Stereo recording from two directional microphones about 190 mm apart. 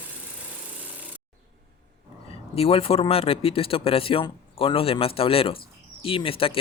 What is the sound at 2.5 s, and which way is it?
Speech, 30° left (ahead or behind).